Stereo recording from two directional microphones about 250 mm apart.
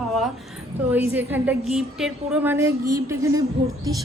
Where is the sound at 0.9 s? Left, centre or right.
Centre.